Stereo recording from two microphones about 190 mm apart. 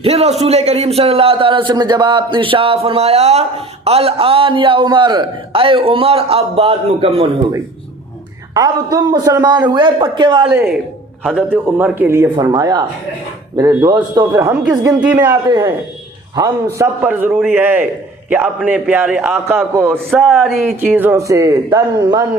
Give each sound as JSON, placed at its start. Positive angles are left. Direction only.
{"t": 0.0, "sound": "a man's voice", "side_deg": -35}
{"t": 8.5, "sound": "a man's voice", "side_deg": -20}
{"t": 10.5, "sound": "a man's voice", "side_deg": -10}
{"t": 14.5, "sound": "a man's voice", "side_deg": -5}
{"t": 15.3, "sound": "a man's voice", "side_deg": -20}
{"t": 16.7, "sound": "a man's voice", "side_deg": -10}
{"t": 20.1, "sound": "speech", "side_deg": 0}
{"t": 20.9, "sound": "a man's voice", "side_deg": -10}